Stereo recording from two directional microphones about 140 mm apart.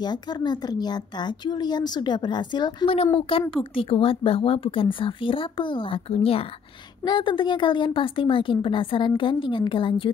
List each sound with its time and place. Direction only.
0.0 s speech: 30° left (ahead or behind)
3.0 s speech: 40° left (ahead or behind)